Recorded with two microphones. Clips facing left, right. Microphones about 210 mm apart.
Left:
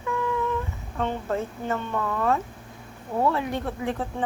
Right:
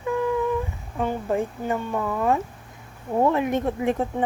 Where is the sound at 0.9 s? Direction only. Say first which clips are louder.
Right 3 dB; 15° right (ahead or behind).